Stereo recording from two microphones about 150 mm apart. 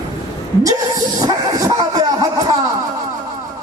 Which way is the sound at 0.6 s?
25° right (ahead or behind).